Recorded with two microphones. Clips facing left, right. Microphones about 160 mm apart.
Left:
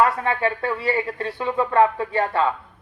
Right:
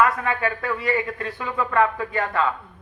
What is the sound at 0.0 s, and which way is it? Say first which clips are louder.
A man's voice: left 1 dB; 30° left (ahead or behind).